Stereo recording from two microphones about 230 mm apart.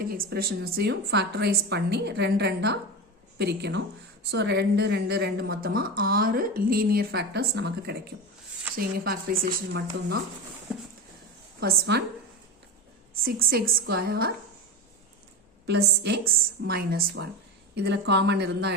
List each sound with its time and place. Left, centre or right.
0.0 s a woman's voice: right
11.6 s a woman's voice: right
13.2 s a woman's voice: right
15.6 s a woman's voice: right